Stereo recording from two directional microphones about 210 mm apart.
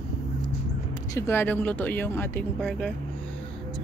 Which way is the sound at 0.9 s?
15° left (ahead or behind).